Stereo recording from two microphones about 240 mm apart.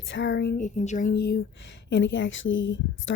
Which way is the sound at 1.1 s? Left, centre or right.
Left.